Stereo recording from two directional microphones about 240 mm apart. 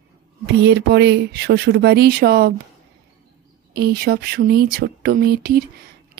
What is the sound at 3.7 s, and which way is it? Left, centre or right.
Speech, right.